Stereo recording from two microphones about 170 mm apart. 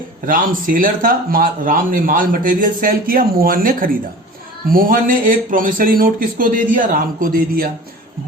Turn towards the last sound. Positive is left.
turn(degrees=-60)  # may be behind; listen again after turning